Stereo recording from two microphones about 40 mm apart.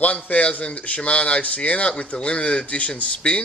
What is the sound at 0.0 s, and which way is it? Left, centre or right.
Speech, left.